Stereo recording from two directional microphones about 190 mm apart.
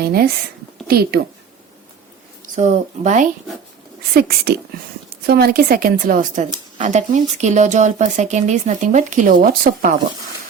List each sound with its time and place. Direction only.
0.0 s a woman's voice: 55° right (ahead or behind)
2.6 s speech: 40° right (ahead or behind)
4.1 s a woman's voice: 55° right (ahead or behind)